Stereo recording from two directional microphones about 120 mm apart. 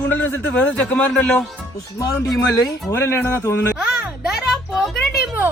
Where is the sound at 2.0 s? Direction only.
30° left (ahead or behind).